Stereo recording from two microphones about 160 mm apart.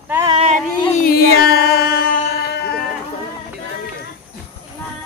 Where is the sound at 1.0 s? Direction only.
75° left (ahead or behind).